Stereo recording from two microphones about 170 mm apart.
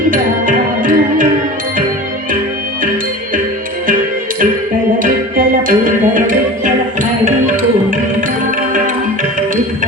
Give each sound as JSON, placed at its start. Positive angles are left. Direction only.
{"t": 0.1, "sound": "music", "side_deg": -55}
{"t": 5.0, "sound": "music", "side_deg": -55}